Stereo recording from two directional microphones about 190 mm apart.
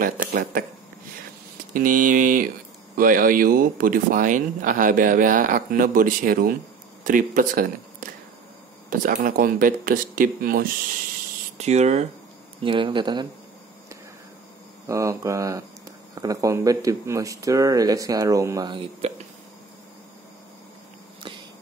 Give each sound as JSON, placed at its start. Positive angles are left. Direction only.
{"t": 0.0, "sound": "speech", "side_deg": -45}
{"t": 1.7, "sound": "speech", "side_deg": -45}
{"t": 11.5, "sound": "speech", "side_deg": -35}
{"t": 14.9, "sound": "speech", "side_deg": -15}